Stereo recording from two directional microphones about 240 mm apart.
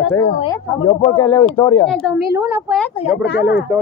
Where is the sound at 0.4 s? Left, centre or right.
Left.